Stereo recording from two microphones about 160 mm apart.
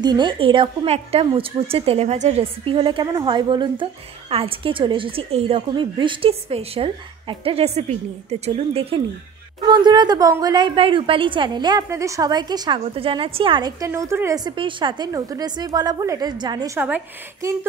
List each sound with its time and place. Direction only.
0.0 s a woman's voice: 25° right (ahead or behind)
9.7 s a woman's voice: 25° right (ahead or behind)